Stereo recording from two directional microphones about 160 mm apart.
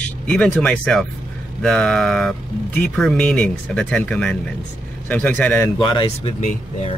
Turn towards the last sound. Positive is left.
turn(degrees=50)  # may be behind; listen again after turning